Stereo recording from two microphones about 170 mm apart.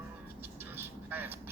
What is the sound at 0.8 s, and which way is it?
Vehicle, 10° right (ahead or behind).